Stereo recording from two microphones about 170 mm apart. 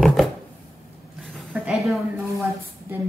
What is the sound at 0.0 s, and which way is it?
Chopping, centre (ahead or behind).